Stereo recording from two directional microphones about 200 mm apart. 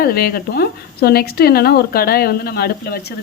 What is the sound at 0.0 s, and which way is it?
Speech, 50° left (ahead or behind).